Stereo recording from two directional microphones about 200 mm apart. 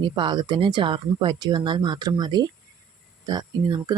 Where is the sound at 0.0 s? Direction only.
25° right (ahead or behind).